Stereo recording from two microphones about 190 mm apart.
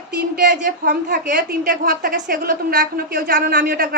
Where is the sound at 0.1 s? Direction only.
55° right (ahead or behind).